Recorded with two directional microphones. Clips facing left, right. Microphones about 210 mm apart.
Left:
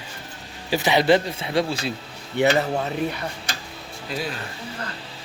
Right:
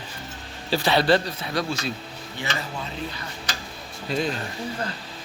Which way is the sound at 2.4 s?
65° left (ahead or behind).